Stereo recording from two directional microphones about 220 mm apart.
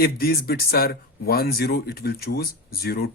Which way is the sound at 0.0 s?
45° left (ahead or behind).